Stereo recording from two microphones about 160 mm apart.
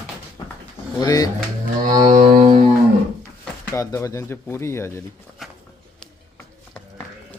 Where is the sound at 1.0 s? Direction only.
25° left (ahead or behind).